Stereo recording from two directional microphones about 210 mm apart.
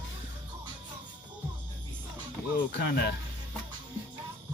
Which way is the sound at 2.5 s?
45° left (ahead or behind).